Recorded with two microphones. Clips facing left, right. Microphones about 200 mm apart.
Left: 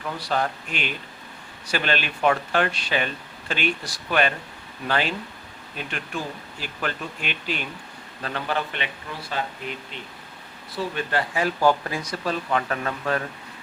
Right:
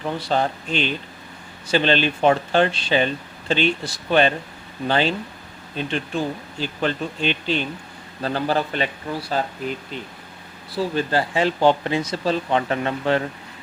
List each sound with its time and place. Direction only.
0.0 s a man's voice: 30° right (ahead or behind)
10.9 s speech: 30° right (ahead or behind)